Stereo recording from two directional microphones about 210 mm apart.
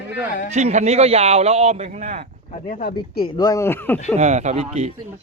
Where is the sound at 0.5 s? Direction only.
35° right (ahead or behind).